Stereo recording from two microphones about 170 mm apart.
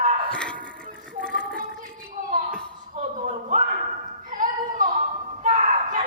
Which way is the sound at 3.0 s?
45° right (ahead or behind).